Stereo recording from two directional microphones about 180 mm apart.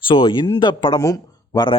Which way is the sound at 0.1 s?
30° left (ahead or behind).